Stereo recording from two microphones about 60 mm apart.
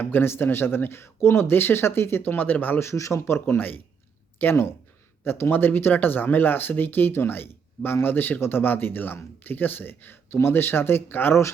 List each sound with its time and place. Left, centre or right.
0.0 s speech: left
2.8 s speech: left